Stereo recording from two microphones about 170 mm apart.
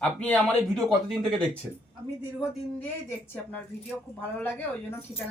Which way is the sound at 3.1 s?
10° left (ahead or behind).